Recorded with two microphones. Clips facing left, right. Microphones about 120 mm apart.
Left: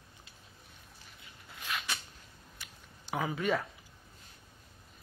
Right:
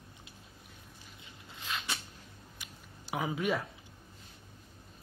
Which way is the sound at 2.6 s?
15° right (ahead or behind).